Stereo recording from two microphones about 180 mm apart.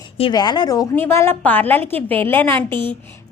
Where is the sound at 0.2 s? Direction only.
25° left (ahead or behind).